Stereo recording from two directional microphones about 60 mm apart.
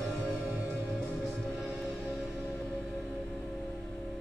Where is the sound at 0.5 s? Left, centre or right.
Right.